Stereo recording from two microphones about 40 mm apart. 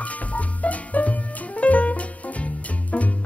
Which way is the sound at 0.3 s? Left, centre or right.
Left.